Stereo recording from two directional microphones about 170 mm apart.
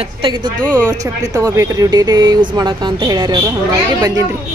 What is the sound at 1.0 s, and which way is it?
Speech, 20° right (ahead or behind).